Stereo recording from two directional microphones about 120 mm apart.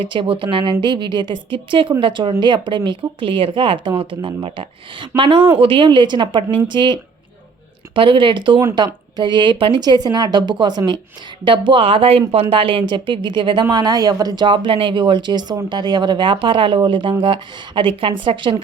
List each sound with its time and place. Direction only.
0.0 s speech: 45° right (ahead or behind)